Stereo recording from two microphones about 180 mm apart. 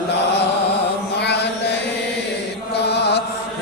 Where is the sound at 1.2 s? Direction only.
70° left (ahead or behind).